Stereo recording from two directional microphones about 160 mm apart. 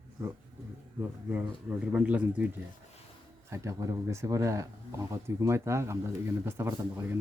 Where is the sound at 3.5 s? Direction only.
20° right (ahead or behind).